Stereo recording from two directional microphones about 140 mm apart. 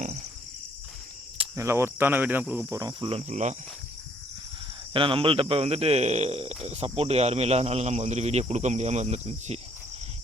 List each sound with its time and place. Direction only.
1.5 s cricket: 20° right (ahead or behind)
2.7 s cricket: 30° right (ahead or behind)
3.1 s cricket: 50° right (ahead or behind)
4.9 s speech: 40° right (ahead or behind)